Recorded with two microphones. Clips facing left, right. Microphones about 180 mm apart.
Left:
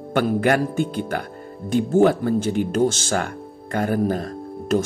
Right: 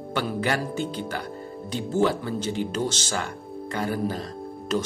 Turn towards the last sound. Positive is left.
turn(degrees=50)  # may be behind; listen again after turning